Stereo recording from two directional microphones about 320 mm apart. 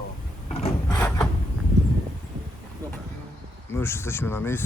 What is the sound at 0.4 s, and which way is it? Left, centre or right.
Wood, centre.